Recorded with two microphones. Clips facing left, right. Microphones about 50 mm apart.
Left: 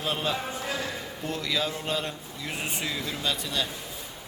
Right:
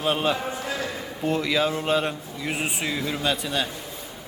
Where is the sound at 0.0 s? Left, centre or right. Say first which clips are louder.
Right 6 dB; right.